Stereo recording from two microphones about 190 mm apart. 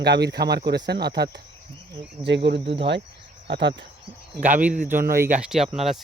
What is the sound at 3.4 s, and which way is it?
Speech, 65° right (ahead or behind).